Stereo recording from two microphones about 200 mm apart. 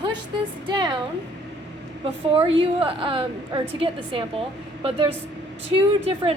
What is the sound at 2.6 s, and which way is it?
A woman's voice, 25° right (ahead or behind).